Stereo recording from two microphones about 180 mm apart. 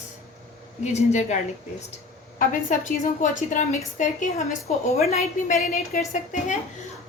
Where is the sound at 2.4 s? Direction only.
45° left (ahead or behind).